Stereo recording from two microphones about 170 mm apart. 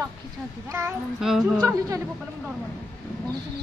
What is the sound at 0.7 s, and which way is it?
Speech, 15° right (ahead or behind).